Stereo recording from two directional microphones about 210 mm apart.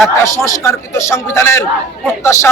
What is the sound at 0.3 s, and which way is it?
A man's voice, 15° left (ahead or behind).